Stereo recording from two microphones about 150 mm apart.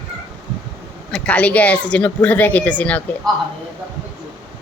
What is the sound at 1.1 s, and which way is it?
A woman's voice, 10° left (ahead or behind).